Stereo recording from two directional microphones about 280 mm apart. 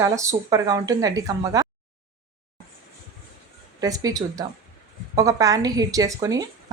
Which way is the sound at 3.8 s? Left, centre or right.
Centre.